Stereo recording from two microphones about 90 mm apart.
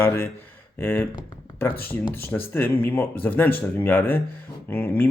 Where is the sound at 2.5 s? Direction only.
20° left (ahead or behind).